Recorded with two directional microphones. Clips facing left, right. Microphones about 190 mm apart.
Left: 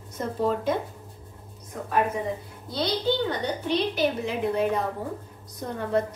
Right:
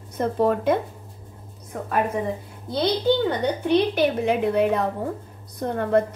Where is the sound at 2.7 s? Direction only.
55° right (ahead or behind).